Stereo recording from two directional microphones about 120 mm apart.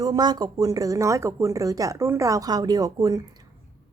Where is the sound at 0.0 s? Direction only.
35° right (ahead or behind).